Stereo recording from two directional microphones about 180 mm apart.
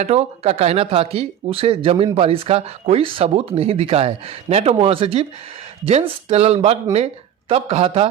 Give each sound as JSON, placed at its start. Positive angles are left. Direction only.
{"t": 0.0, "sound": "speech", "side_deg": -35}